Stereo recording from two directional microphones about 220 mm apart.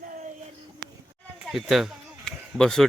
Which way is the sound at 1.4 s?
Centre (ahead or behind).